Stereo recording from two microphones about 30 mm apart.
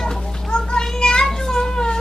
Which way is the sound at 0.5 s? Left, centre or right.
Left.